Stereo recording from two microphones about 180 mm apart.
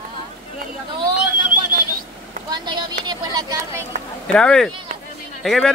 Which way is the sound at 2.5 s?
25° right (ahead or behind).